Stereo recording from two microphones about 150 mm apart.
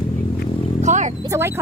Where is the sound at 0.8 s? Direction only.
55° right (ahead or behind).